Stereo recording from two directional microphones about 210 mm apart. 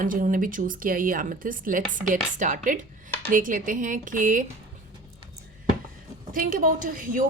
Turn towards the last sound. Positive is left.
turn(degrees=-40)  # may be behind; listen again after turning